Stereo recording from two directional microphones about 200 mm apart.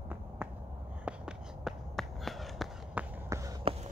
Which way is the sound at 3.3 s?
15° right (ahead or behind).